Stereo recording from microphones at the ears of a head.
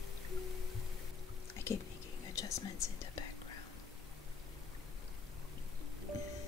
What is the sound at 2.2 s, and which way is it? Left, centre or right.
Whispering, left.